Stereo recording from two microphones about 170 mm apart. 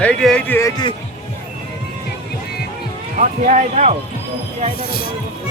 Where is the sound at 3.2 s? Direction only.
50° right (ahead or behind).